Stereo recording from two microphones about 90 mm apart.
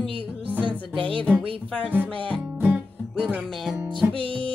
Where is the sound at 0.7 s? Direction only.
70° right (ahead or behind).